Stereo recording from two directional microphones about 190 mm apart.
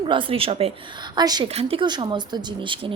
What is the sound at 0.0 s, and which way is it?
A woman's voice, 25° right (ahead or behind).